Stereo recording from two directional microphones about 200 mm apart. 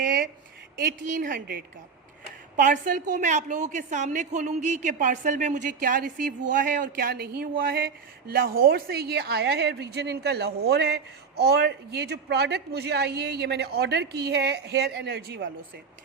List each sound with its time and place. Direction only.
0.8 s a woman's voice: 45° right (ahead or behind)